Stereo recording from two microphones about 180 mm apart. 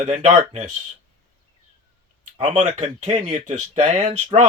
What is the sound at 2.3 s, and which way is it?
Speech, 30° right (ahead or behind).